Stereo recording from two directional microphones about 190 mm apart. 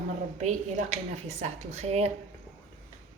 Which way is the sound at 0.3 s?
40° right (ahead or behind).